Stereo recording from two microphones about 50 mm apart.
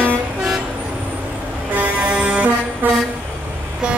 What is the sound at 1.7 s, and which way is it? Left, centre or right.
Music, right.